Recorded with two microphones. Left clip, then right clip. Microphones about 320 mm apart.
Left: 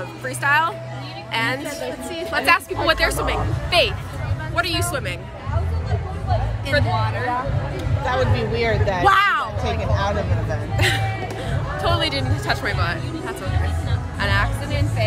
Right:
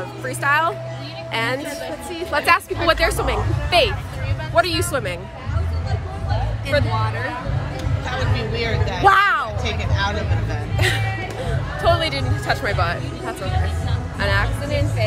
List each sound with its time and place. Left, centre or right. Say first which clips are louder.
0.4 s a woman's voice: even; centre
4.6 s speech: right 4 dB; centre
8.0 s speech: left 5 dB; left
9.0 s a sound: right 2 dB; centre
10.8 s speech: even; centre
14.2 s speech: even; centre